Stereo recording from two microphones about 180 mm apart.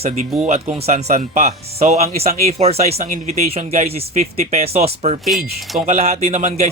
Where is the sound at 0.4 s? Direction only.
35° right (ahead or behind).